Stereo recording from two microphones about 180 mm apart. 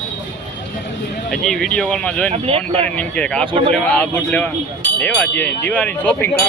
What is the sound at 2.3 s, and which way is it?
Speech, 35° right (ahead or behind).